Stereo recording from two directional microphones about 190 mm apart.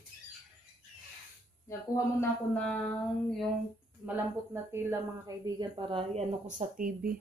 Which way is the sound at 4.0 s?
10° right (ahead or behind).